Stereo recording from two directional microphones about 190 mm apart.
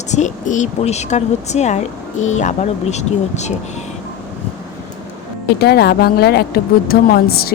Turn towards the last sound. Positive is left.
turn(degrees=55)  # may be behind; listen again after turning